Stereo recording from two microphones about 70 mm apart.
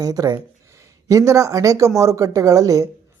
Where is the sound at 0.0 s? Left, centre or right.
Right.